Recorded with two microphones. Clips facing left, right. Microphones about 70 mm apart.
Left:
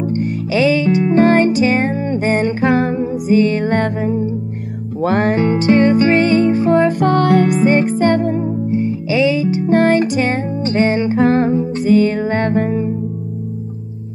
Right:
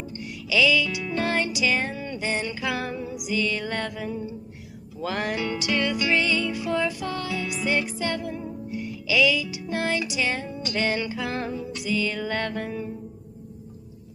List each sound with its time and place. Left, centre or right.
0.0 s music: left